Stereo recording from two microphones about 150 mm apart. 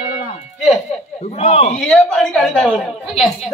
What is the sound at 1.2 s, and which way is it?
Speech, 45° left (ahead or behind).